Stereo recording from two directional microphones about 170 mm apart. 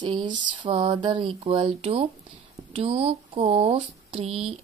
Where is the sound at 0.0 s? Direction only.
30° right (ahead or behind).